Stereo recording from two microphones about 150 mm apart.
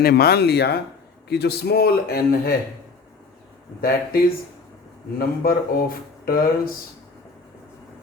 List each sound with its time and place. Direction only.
0.0 s a man's voice: 90° left
3.8 s a man's voice: 90° left
5.1 s speech: 80° left